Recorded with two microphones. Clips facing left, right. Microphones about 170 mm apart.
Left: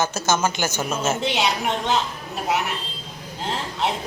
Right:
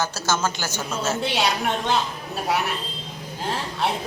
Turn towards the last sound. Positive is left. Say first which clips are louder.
# even
turn(degrees=20)  # may be behind; listen again after turning